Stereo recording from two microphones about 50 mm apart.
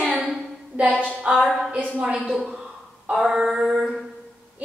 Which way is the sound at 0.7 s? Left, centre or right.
Right.